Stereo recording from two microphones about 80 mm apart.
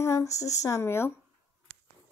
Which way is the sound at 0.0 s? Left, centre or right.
Left.